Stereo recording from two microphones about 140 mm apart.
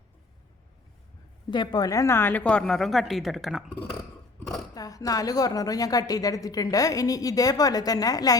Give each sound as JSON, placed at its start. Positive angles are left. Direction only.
{"t": 1.5, "sound": "a woman's voice", "side_deg": 30}
{"t": 4.7, "sound": "a woman's voice", "side_deg": 25}